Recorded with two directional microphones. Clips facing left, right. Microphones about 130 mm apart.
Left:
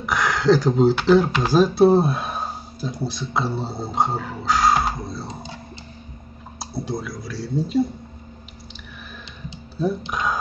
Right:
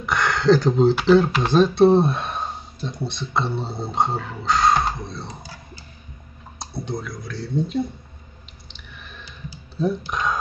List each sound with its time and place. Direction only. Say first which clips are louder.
0.0 s speech: even; centre (ahead or behind)
5.3 s a sound: left 4 dB; 25° left (ahead or behind)
6.6 s speech: left 2 dB; 5° left (ahead or behind)
9.8 s speech: even; centre (ahead or behind)